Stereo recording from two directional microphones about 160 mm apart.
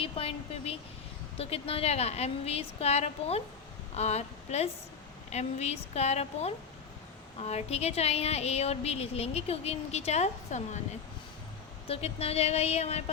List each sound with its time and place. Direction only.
0.0 s a woman's voice: 35° left (ahead or behind)
11.9 s speech: 40° left (ahead or behind)